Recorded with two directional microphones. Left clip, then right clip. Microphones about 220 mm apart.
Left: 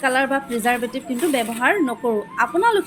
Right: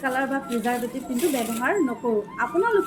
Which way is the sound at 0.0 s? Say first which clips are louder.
Left 6 dB; 45° left (ahead or behind).